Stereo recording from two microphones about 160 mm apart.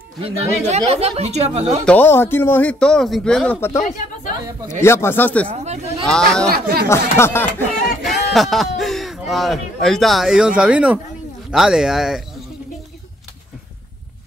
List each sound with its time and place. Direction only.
0.2 s speech: 40° right (ahead or behind)
1.9 s speech: 10° left (ahead or behind)
3.8 s speech: 55° left (ahead or behind)
4.6 s speech: 15° left (ahead or behind)
5.5 s speech: 40° right (ahead or behind)
6.0 s speech: 5° left (ahead or behind)
6.5 s speech: 70° right (ahead or behind)
6.9 s speech: 15° left (ahead or behind)
7.8 s speech: centre (ahead or behind)